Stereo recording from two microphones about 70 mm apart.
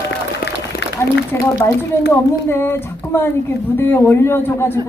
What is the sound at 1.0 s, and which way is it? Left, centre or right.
A man's voice, left.